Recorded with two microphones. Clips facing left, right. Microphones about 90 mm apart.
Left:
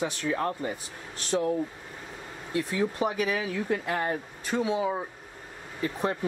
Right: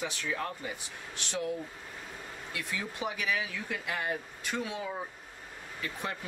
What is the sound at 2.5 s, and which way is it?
Speech, 35° left (ahead or behind).